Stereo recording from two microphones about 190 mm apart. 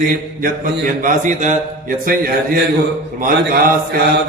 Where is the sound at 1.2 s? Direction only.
40° right (ahead or behind).